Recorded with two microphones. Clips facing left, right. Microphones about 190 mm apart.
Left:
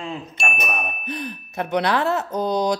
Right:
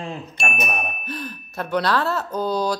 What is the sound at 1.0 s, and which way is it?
Speech, 15° left (ahead or behind).